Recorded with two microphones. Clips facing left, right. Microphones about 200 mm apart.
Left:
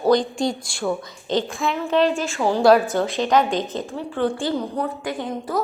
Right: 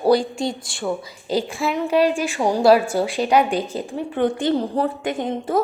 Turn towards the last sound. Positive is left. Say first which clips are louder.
# right 3 dB
turn(degrees=-25)  # may be behind; listen again after turning